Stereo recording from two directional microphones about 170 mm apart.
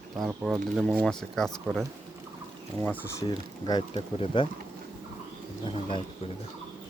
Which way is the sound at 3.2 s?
25° left (ahead or behind).